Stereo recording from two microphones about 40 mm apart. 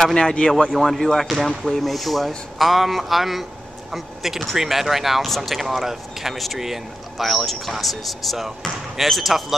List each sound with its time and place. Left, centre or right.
0.0 s speech: centre
0.7 s speech: centre